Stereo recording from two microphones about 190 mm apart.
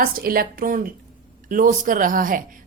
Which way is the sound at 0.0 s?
50° right (ahead or behind).